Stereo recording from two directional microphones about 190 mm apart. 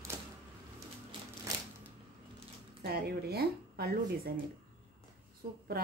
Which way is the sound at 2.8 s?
55° right (ahead or behind).